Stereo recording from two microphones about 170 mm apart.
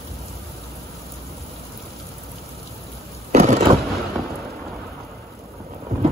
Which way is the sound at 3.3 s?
40° right (ahead or behind).